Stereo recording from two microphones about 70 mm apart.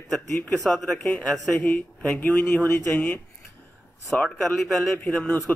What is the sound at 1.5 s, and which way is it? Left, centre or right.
A man's voice, left.